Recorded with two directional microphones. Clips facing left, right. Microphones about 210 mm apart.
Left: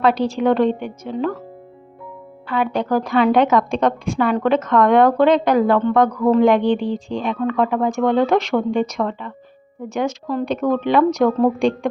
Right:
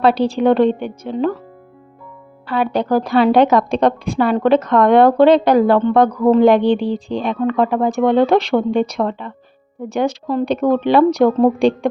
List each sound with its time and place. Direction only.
0.0 s a woman's voice: 30° right (ahead or behind)
2.5 s a woman's voice: 35° right (ahead or behind)